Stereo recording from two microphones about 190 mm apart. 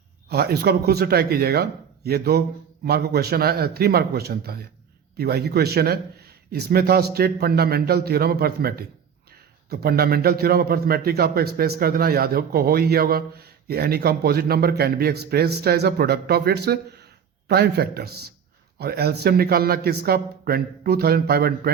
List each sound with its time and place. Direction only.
0.3 s a man's voice: 55° right (ahead or behind)